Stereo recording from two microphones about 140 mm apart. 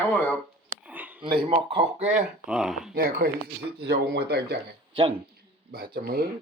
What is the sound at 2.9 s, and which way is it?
Speech, 90° right.